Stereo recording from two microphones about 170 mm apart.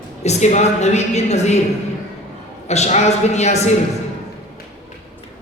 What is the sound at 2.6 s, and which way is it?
A woman's voice, 40° left (ahead or behind).